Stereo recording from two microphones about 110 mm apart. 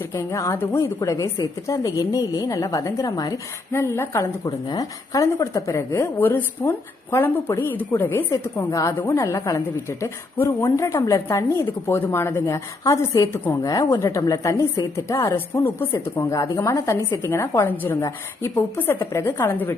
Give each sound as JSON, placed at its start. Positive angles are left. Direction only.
{"t": 0.1, "sound": "a woman's voice", "side_deg": 30}
{"t": 4.4, "sound": "speech", "side_deg": 35}